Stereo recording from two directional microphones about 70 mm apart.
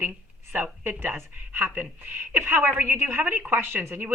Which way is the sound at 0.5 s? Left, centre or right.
Right.